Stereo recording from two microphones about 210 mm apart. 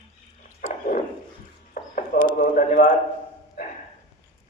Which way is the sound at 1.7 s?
40° left (ahead or behind).